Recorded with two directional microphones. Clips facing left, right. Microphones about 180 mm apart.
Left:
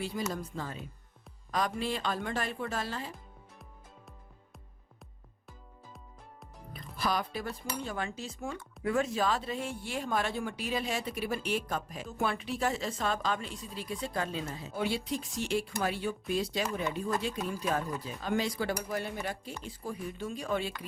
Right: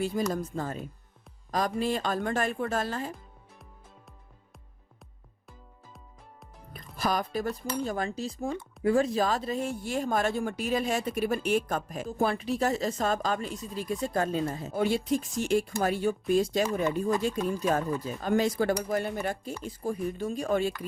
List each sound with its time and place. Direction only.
0.3 s speech: 45° right (ahead or behind)
6.7 s speech: 45° right (ahead or behind)
17.3 s speech: 5° left (ahead or behind)
17.6 s speech: 45° right (ahead or behind)